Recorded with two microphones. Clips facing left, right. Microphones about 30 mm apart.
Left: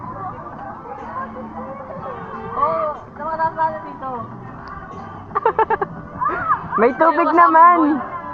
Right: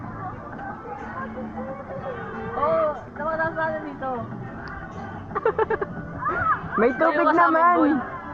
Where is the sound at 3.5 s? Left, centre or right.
Centre.